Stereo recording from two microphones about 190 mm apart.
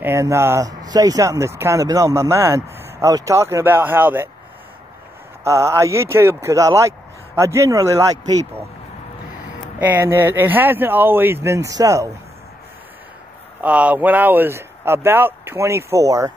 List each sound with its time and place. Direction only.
0.0 s speech: 15° right (ahead or behind)
5.4 s speech: 15° right (ahead or behind)
9.8 s speech: 10° right (ahead or behind)
13.6 s speech: 5° right (ahead or behind)